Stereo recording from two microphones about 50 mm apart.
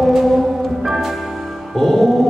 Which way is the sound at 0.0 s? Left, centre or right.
Centre.